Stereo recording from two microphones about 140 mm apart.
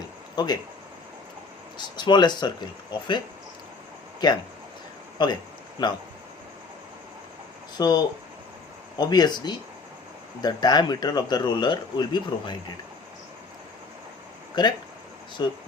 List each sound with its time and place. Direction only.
0.3 s speech: 30° left (ahead or behind)
2.0 s speech: 30° left (ahead or behind)
4.2 s speech: 30° left (ahead or behind)
7.8 s speech: 30° left (ahead or behind)
14.6 s speech: 30° left (ahead or behind)